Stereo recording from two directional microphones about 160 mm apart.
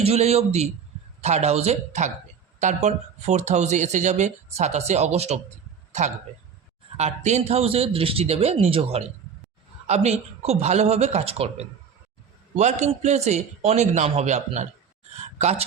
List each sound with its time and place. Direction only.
0.0 s a man's voice: 40° right (ahead or behind)
6.9 s a man's voice: 45° right (ahead or behind)